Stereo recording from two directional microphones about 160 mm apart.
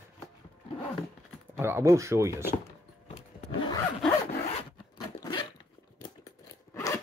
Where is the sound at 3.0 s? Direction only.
40° left (ahead or behind).